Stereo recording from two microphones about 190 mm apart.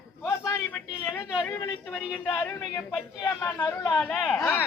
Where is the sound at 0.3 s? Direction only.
10° left (ahead or behind).